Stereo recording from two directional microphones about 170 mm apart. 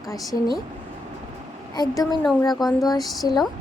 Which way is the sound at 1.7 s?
25° left (ahead or behind).